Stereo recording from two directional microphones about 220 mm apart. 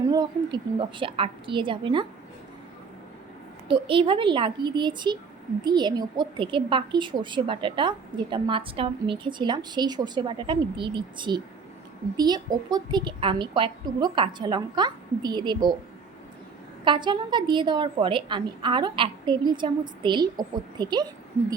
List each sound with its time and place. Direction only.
0.1 s a woman's voice: 20° right (ahead or behind)
3.7 s a woman's voice: 25° right (ahead or behind)
16.8 s a woman's voice: 20° right (ahead or behind)